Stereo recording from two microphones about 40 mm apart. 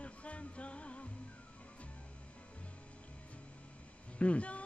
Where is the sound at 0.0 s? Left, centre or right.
Left.